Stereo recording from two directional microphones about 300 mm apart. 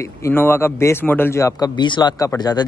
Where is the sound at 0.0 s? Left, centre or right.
Centre.